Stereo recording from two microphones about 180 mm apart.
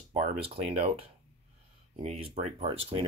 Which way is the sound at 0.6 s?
35° right (ahead or behind).